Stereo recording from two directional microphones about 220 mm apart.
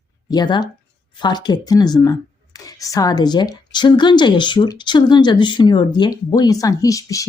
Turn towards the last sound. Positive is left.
turn(degrees=15)  # may be behind; listen again after turning